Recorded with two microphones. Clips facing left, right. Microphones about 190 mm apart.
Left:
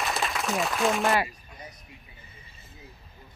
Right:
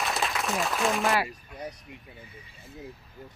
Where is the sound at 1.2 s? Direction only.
65° right (ahead or behind).